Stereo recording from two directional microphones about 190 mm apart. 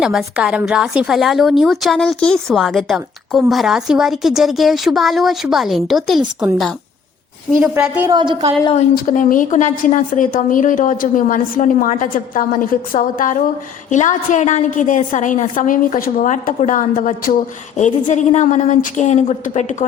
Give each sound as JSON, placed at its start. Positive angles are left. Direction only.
{"t": 0.0, "sound": "a woman's voice", "side_deg": 0}
{"t": 8.1, "sound": "a woman's voice", "side_deg": -25}
{"t": 9.0, "sound": "a woman's voice", "side_deg": 45}